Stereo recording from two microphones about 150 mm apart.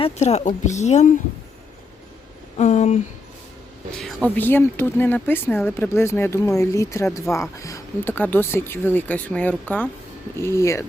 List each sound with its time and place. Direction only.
0.0 s speech: 45° left (ahead or behind)
2.6 s speech: 50° left (ahead or behind)
4.0 s speech: 10° left (ahead or behind)